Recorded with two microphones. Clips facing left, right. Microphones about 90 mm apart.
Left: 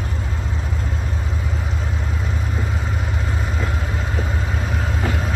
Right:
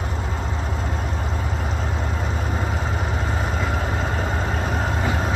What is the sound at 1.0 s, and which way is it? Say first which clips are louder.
Vehicle: right 1 dB; 50° right (ahead or behind).